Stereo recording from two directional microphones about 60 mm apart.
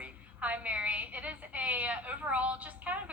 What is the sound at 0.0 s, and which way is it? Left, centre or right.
A woman's voice, right.